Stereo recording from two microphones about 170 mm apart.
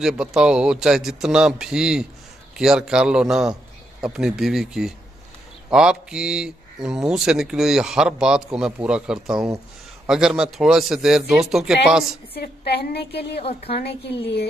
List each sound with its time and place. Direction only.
0.0 s speech: 5° right (ahead or behind)
12.4 s a woman's voice: 75° left (ahead or behind)
13.4 s a woman's voice: 35° left (ahead or behind)
13.7 s a woman's voice: 70° left (ahead or behind)